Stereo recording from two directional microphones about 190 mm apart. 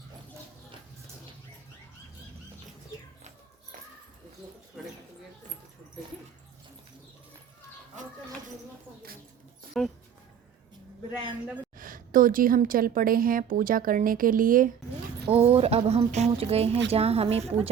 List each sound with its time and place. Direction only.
4.8 s a sound: centre (ahead or behind)
9.7 s speech: centre (ahead or behind)
11.8 s a woman's voice: 45° right (ahead or behind)
15.3 s speech: 30° right (ahead or behind)